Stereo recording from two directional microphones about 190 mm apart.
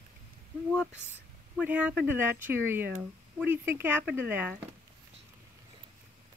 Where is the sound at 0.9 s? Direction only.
10° left (ahead or behind).